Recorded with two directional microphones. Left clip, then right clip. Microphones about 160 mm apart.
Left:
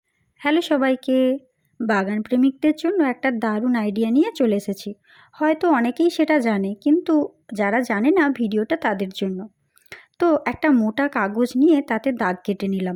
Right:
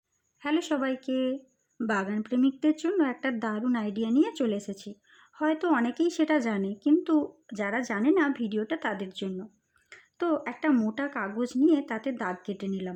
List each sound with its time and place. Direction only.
0.3 s a woman's voice: 35° left (ahead or behind)